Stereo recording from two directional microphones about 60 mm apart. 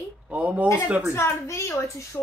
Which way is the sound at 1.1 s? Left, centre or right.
Left.